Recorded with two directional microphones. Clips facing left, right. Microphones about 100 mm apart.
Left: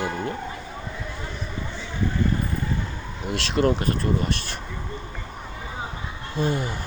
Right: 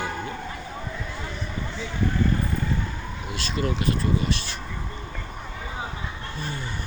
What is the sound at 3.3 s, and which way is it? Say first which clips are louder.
Speech: left 6 dB; 70° left (ahead or behind).